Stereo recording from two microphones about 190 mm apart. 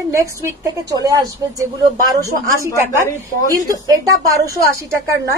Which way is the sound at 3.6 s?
20° right (ahead or behind).